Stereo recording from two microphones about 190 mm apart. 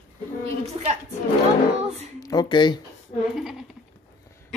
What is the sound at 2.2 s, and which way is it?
Speech, 20° left (ahead or behind).